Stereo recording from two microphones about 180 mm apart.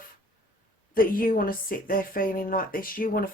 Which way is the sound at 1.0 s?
50° left (ahead or behind).